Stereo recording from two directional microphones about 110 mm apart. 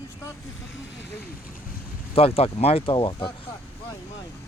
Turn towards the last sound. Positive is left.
turn(degrees=45)  # may be behind; listen again after turning